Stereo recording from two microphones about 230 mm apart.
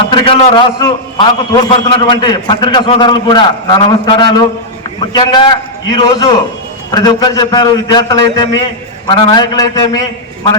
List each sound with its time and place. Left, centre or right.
0.0 s a man's voice: left